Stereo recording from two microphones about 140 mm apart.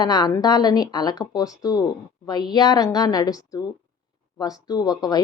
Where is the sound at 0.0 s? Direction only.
30° left (ahead or behind).